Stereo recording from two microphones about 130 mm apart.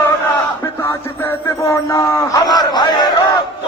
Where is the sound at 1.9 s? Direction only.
25° left (ahead or behind).